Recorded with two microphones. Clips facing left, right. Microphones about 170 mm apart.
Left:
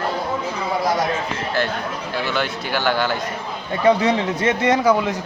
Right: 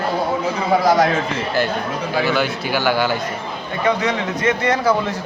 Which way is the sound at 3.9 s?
30° left (ahead or behind).